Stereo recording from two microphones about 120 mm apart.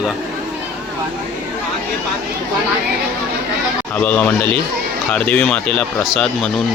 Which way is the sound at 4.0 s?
15° left (ahead or behind).